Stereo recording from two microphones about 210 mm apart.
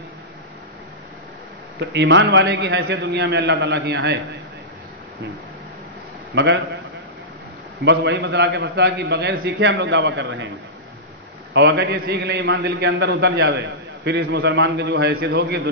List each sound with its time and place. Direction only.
1.8 s a man's voice: 55° right (ahead or behind)
6.3 s a man's voice: 55° right (ahead or behind)
7.8 s a man's voice: 55° right (ahead or behind)
11.5 s a man's voice: 55° right (ahead or behind)